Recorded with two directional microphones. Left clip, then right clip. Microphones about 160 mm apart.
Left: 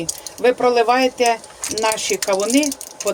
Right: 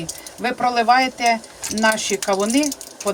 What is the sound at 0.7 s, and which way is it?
Speech, 35° left (ahead or behind).